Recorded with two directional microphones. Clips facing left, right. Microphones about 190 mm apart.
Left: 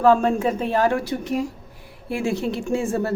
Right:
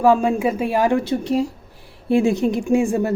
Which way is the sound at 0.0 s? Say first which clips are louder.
Right 1 dB; 10° right (ahead or behind).